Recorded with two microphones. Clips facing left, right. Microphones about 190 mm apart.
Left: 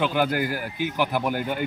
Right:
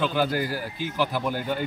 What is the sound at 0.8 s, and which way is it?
Speech, 15° left (ahead or behind).